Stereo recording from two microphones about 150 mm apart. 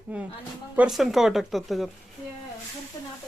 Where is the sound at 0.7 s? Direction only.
5° right (ahead or behind).